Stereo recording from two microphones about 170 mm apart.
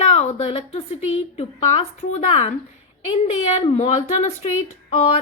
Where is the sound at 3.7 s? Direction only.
40° left (ahead or behind).